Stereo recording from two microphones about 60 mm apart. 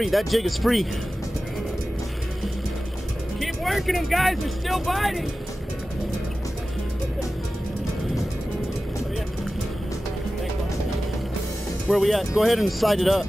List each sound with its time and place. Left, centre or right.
0.0 s speech: centre
3.3 s speech: centre
11.9 s speech: centre